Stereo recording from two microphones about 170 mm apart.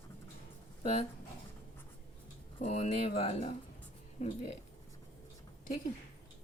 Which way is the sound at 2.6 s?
40° left (ahead or behind).